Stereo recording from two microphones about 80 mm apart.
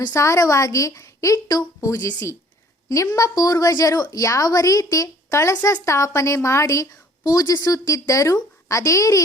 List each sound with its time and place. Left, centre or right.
0.1 s a woman's voice: left
7.3 s speech: left